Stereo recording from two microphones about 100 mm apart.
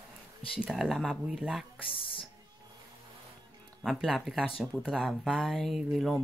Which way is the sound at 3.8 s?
Centre (ahead or behind).